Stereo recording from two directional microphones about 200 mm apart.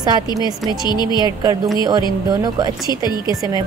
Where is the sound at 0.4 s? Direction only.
20° left (ahead or behind).